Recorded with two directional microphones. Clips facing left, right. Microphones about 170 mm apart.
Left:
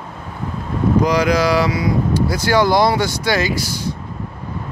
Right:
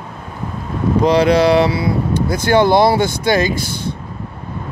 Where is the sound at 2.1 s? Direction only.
55° right (ahead or behind).